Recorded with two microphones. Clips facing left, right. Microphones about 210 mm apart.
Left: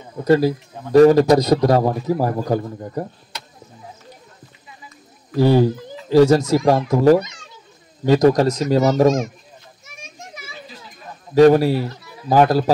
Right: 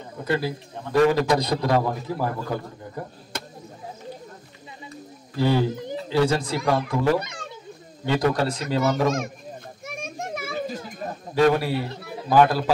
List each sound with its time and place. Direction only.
0.2 s a man's voice: 40° left (ahead or behind)
3.3 s chop: 50° right (ahead or behind)
5.3 s a man's voice: 40° left (ahead or behind)
7.2 s a sound: 55° right (ahead or behind)
8.0 s a man's voice: 40° left (ahead or behind)
9.8 s children playing: 55° right (ahead or behind)
11.3 s a man's voice: 40° left (ahead or behind)